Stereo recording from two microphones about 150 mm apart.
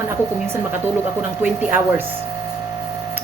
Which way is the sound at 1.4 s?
10° right (ahead or behind).